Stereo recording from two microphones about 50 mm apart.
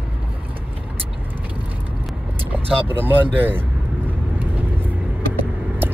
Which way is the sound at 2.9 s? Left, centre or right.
Right.